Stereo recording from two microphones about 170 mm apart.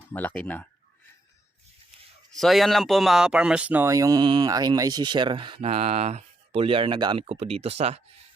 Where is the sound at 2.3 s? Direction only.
Centre (ahead or behind); by 8.0 s 40° right (ahead or behind).